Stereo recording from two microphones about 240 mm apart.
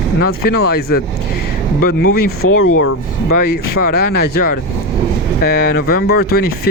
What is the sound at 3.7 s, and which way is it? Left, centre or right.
Speech, left.